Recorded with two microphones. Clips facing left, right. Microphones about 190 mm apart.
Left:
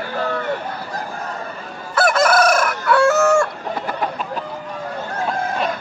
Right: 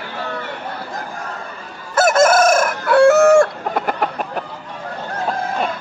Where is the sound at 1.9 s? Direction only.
45° right (ahead or behind); by 4.5 s 60° right (ahead or behind).